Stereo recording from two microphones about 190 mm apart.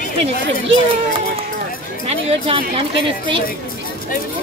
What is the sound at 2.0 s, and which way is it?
Music, 30° right (ahead or behind).